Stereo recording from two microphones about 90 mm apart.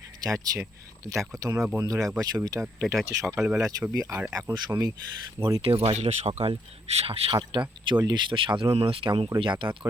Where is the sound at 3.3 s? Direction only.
5° right (ahead or behind).